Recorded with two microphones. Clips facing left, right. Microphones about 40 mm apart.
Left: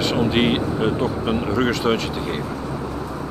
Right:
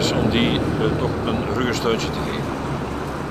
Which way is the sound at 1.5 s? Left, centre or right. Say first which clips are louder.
Left 2 dB; centre.